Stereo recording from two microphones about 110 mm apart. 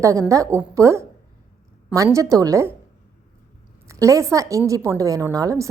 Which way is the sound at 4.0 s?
30° right (ahead or behind).